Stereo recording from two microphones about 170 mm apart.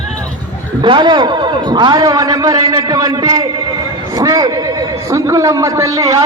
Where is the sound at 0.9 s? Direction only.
30° right (ahead or behind).